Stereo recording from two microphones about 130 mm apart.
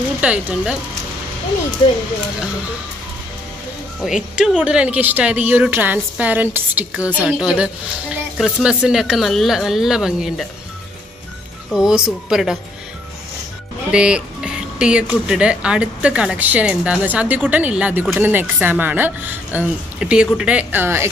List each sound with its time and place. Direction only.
0.2 s speech: 10° right (ahead or behind)
4.0 s speech: 5° right (ahead or behind)
11.7 s speech: 5° right (ahead or behind)
13.9 s speech: 10° right (ahead or behind)